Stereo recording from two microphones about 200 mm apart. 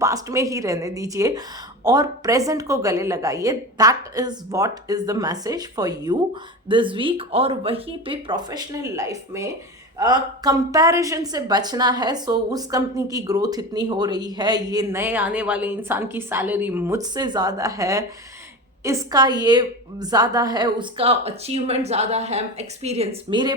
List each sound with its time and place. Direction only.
0.0 s a woman's voice: 15° right (ahead or behind)